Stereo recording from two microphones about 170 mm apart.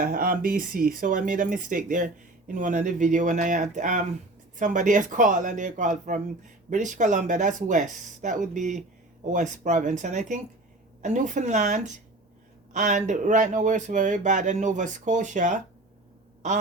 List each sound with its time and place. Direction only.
0.0 s speech: 55° right (ahead or behind)